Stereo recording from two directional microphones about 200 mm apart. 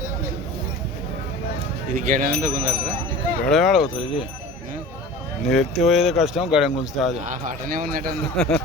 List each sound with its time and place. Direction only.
2.0 s speech: 40° right (ahead or behind)
3.4 s speech: centre (ahead or behind)
5.5 s speech: centre (ahead or behind)
7.3 s speech: 45° right (ahead or behind)
8.4 s speech: 5° left (ahead or behind)